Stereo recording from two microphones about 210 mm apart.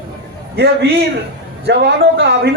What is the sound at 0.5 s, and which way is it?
A man's voice, 55° right (ahead or behind).